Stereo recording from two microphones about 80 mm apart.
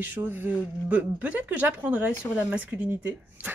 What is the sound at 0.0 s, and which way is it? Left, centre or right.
Speech, right.